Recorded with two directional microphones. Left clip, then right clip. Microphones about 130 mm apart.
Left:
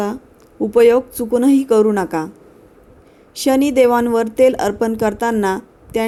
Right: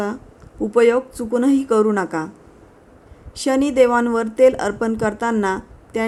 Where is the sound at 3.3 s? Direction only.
20° left (ahead or behind).